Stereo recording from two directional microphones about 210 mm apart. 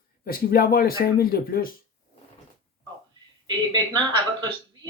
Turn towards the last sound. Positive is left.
turn(degrees=-20)  # may be behind; listen again after turning